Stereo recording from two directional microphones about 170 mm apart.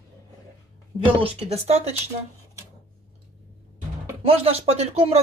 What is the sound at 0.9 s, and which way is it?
Speech, 35° right (ahead or behind).